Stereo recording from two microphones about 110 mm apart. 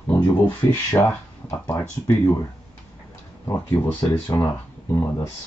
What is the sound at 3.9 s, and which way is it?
Speech, 40° left (ahead or behind).